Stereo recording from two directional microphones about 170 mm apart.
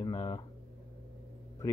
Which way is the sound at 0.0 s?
25° left (ahead or behind).